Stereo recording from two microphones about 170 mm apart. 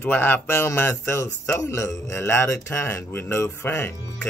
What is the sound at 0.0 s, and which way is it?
Speech, 15° left (ahead or behind).